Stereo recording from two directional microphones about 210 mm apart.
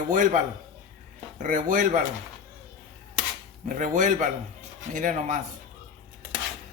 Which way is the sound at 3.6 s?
35° right (ahead or behind).